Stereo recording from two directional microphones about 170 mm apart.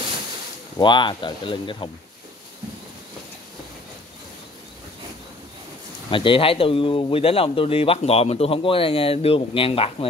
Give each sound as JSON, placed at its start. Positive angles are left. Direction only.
{"t": 0.7, "sound": "speech", "side_deg": 25}
{"t": 6.0, "sound": "speech", "side_deg": 30}